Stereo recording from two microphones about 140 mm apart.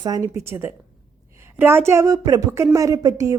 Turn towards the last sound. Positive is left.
turn(degrees=-25)  # may be behind; listen again after turning